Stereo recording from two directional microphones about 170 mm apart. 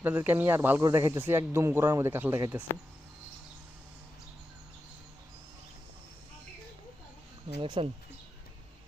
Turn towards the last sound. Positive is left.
turn(degrees=-30)  # may be behind; listen again after turning